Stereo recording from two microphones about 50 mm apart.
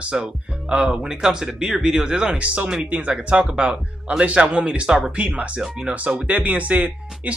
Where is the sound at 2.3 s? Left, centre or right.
Right.